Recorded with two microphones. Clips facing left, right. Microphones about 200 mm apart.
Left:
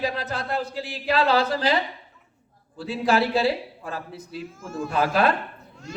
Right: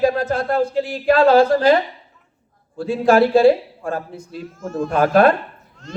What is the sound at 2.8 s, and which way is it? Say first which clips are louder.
A man's voice: right 8 dB; 50° right (ahead or behind).